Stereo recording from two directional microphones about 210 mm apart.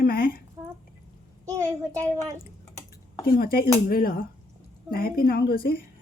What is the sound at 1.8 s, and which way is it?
Speech, 15° right (ahead or behind).